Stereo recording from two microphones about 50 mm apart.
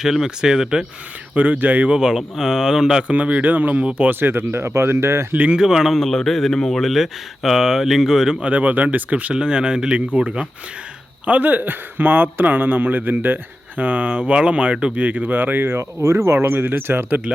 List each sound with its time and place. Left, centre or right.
0.0 s speech: centre
1.4 s a man's voice: right
2.0 s speech: centre
3.1 s a man's voice: right
4.1 s speech: right
5.3 s speech: right
5.5 s speech: centre
6.0 s speech: centre
8.4 s speech: right
9.3 s speech: centre
11.3 s a man's voice: right
16.0 s speech: right